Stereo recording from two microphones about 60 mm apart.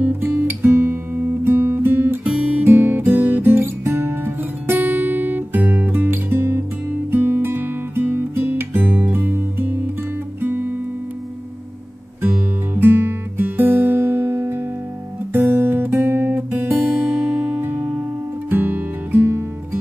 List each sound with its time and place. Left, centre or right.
0.0 s guitar: right
2.6 s music: right
3.5 s music: right
12.7 s music: right
15.3 s guitar: right
16.8 s music: right